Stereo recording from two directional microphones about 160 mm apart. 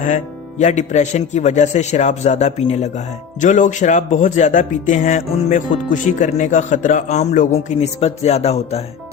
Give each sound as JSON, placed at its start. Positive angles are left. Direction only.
{"t": 0.6, "sound": "a man's voice", "side_deg": 50}
{"t": 3.4, "sound": "a man's voice", "side_deg": 50}